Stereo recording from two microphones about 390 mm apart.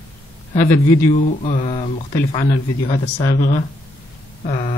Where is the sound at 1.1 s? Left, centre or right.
Centre.